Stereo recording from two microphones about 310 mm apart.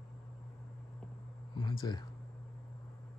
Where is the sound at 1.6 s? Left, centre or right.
Centre.